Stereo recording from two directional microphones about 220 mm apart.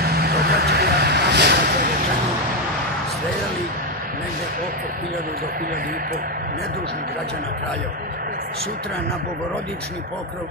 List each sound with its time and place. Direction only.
0.0 s vehicle: 45° right (ahead or behind)